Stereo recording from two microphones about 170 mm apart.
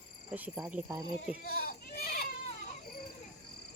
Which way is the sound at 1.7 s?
60° left (ahead or behind).